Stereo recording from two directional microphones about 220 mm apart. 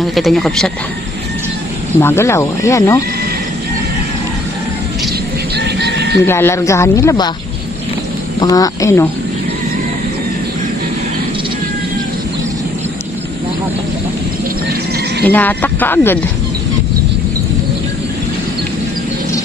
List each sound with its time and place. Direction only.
0.0 s speech: centre (ahead or behind)
2.0 s speech: 10° left (ahead or behind)
5.6 s chicken: 50° right (ahead or behind)
6.2 s speech: 10° left (ahead or behind)
8.4 s speech: 15° left (ahead or behind)
15.2 s speech: 10° left (ahead or behind)